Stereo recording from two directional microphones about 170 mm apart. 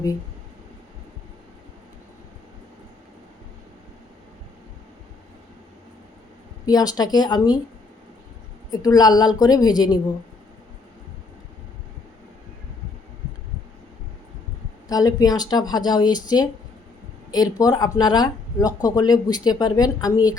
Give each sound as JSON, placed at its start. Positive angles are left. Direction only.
{"t": 6.7, "sound": "speech", "side_deg": 20}
{"t": 8.7, "sound": "speech", "side_deg": 25}
{"t": 14.8, "sound": "speech", "side_deg": 20}